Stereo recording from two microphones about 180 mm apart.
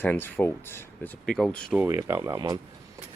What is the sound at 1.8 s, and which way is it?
Speech, 15° right (ahead or behind).